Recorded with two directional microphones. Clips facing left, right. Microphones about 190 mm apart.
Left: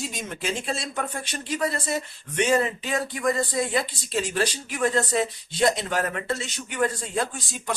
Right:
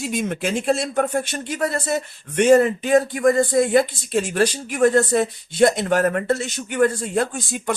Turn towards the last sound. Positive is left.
turn(degrees=-55)  # may be behind; listen again after turning